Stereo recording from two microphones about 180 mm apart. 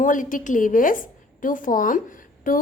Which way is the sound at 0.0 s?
45° left (ahead or behind).